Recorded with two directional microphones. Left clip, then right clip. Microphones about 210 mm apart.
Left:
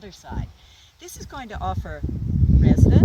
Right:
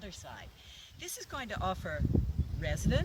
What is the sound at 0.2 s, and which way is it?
Speech, 20° right (ahead or behind).